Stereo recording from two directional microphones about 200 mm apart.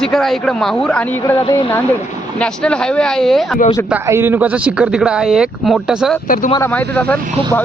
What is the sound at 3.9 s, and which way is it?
Speech, 10° right (ahead or behind).